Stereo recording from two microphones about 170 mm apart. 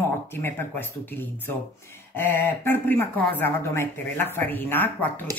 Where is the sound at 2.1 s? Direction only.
10° left (ahead or behind).